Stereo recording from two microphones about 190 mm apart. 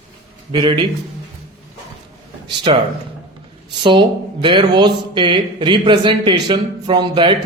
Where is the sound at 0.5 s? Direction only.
25° right (ahead or behind).